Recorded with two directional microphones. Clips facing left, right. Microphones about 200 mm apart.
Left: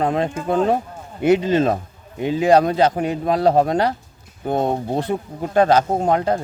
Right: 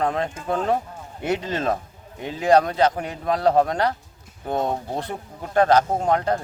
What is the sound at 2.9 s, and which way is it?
Speech, 25° left (ahead or behind).